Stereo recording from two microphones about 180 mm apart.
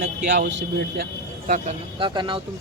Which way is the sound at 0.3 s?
65° right (ahead or behind).